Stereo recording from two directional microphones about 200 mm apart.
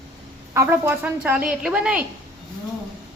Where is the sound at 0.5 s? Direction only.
10° right (ahead or behind).